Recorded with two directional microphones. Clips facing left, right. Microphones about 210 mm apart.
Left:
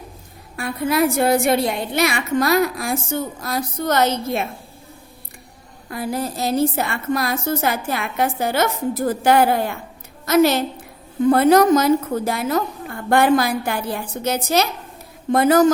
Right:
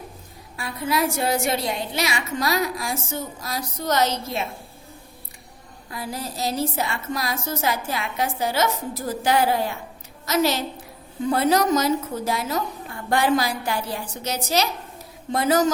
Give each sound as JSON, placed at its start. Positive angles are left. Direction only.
{"t": 0.5, "sound": "a woman's voice", "side_deg": 55}
{"t": 5.9, "sound": "a woman's voice", "side_deg": 55}